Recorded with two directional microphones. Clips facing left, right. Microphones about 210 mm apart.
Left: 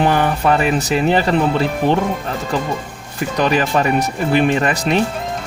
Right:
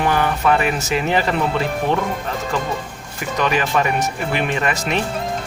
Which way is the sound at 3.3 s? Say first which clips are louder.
Left 3 dB; 35° left (ahead or behind).